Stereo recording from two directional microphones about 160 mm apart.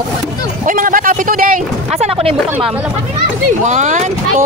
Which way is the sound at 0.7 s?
60° right (ahead or behind).